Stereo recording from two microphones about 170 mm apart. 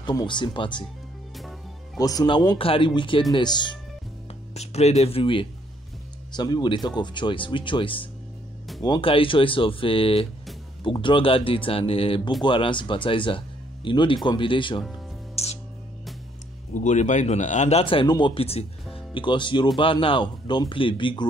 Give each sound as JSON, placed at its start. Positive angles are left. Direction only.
{"t": 0.0, "sound": "speech", "side_deg": 25}
{"t": 2.0, "sound": "speech", "side_deg": 20}
{"t": 4.6, "sound": "speech", "side_deg": 40}
{"t": 15.3, "sound": "music", "side_deg": 40}
{"t": 16.7, "sound": "speech", "side_deg": 45}